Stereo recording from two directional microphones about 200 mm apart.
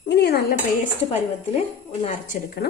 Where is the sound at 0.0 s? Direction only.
55° left (ahead or behind).